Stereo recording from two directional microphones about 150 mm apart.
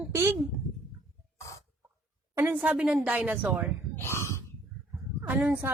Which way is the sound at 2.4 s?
10° right (ahead or behind).